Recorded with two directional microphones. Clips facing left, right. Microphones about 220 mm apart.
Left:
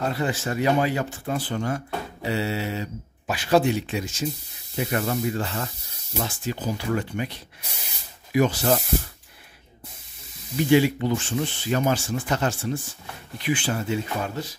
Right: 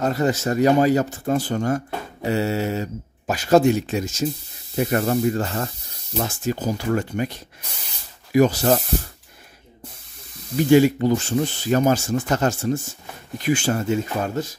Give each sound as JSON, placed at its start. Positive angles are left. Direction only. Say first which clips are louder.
{"t": 0.0, "sound": "speech", "louder": "right 5 dB", "side_deg": -40}
{"t": 10.7, "sound": "speech", "louder": "right 5 dB", "side_deg": -45}